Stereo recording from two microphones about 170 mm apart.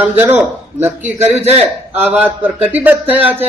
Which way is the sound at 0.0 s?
10° right (ahead or behind).